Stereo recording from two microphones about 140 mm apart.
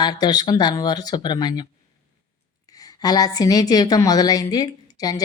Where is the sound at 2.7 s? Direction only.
25° left (ahead or behind).